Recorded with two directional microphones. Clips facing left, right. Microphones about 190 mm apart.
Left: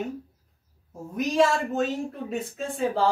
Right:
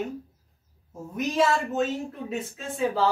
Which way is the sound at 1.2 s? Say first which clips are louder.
Left 2 dB; centre (ahead or behind).